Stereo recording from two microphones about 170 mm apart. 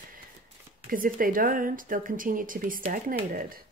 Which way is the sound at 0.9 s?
55° right (ahead or behind).